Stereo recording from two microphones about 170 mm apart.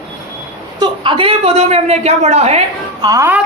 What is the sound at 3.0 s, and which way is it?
Speech, 20° right (ahead or behind).